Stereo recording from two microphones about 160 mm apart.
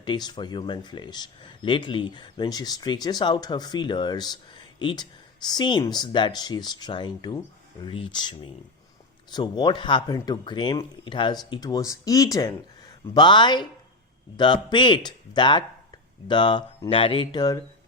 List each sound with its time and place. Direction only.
0.0 s speech: 30° left (ahead or behind)